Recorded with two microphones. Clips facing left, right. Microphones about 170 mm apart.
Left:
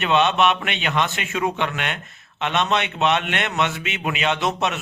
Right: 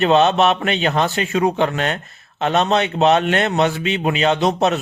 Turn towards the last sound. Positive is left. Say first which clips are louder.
# right 6 dB
turn(degrees=-35)  # may be behind; listen again after turning